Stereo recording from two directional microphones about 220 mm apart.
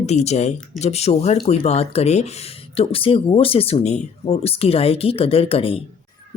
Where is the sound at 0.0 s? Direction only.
30° left (ahead or behind).